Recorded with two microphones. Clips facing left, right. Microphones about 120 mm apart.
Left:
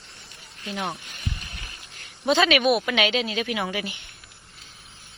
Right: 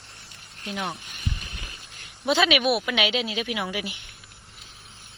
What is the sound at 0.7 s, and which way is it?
Speech, 10° left (ahead or behind).